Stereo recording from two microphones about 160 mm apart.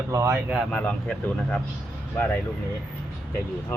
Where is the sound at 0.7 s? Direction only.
5° left (ahead or behind).